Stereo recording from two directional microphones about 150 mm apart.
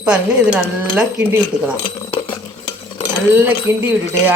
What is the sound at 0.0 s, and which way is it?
Speech, 5° right (ahead or behind).